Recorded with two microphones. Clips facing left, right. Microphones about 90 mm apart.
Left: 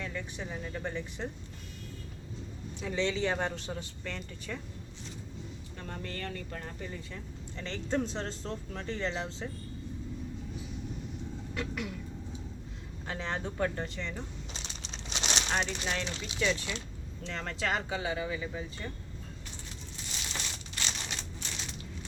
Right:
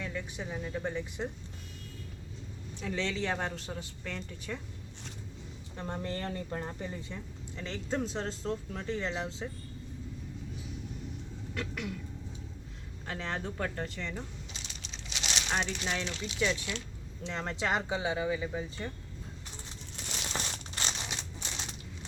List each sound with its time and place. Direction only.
0.0 s speech: 10° right (ahead or behind)
2.8 s speech: centre (ahead or behind)
5.7 s speech: 25° right (ahead or behind)
7.5 s speech: 5° right (ahead or behind)
11.5 s speech: 5° left (ahead or behind)
13.1 s speech: centre (ahead or behind)
14.5 s a sound: 30° left (ahead or behind)
15.6 s speech: 15° left (ahead or behind)
16.4 s speech: 15° right (ahead or behind)
20.3 s crumpling: 35° right (ahead or behind)
21.0 s crumpling: 15° right (ahead or behind)